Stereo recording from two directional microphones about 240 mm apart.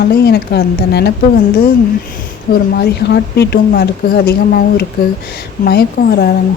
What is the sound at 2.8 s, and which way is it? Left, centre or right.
A woman's voice, left.